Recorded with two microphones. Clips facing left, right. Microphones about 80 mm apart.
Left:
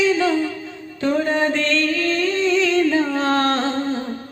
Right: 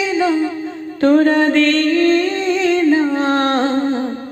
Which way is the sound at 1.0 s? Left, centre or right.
Right.